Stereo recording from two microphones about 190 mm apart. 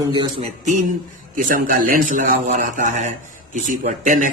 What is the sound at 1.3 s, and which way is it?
Speech, 45° right (ahead or behind).